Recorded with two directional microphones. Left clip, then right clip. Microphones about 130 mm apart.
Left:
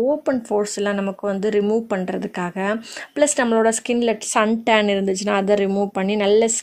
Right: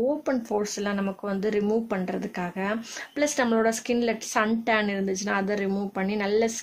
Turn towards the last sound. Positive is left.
turn(degrees=60)  # may be behind; listen again after turning